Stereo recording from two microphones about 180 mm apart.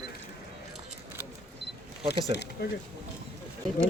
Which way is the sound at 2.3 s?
70° left (ahead or behind).